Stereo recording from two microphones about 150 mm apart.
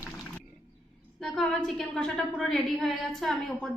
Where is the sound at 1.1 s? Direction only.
5° left (ahead or behind).